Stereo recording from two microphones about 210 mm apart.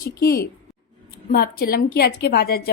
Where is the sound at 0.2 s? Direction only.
45° left (ahead or behind).